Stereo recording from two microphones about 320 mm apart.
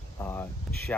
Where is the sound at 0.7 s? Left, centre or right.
Centre.